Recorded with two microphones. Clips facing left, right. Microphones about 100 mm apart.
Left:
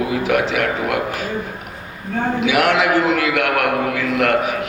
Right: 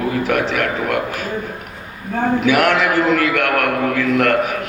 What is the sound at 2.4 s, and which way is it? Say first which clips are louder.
A man's voice: even; 45° right (ahead or behind).